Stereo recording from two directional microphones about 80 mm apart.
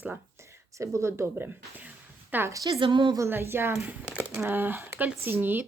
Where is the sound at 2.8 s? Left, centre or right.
Right.